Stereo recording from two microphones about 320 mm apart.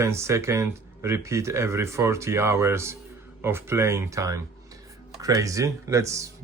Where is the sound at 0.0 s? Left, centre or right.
Centre.